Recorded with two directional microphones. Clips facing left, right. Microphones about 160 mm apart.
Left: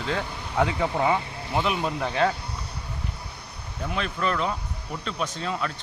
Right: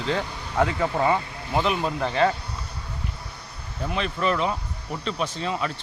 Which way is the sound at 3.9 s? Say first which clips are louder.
Right 2 dB; centre (ahead or behind).